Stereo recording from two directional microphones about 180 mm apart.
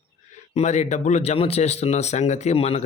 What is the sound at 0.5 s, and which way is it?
Speech, 40° left (ahead or behind).